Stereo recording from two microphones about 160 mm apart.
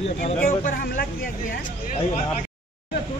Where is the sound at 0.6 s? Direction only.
60° left (ahead or behind).